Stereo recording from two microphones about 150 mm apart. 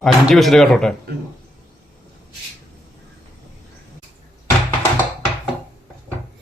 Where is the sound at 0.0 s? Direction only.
Centre (ahead or behind).